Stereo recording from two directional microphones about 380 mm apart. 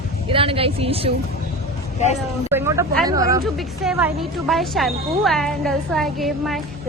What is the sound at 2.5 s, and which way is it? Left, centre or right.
A woman's voice, centre.